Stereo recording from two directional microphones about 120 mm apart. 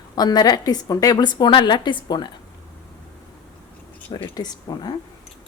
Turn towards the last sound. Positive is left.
turn(degrees=35)  # may be behind; listen again after turning